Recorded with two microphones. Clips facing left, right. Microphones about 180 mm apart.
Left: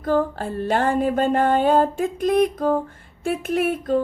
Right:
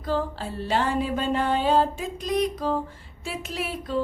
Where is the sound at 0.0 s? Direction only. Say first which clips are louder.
Left 6 dB; 50° left (ahead or behind).